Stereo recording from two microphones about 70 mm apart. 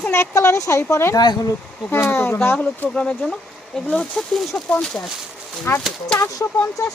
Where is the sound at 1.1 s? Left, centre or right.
Left.